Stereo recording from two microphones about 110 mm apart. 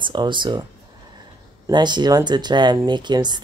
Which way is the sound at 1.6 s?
40° right (ahead or behind).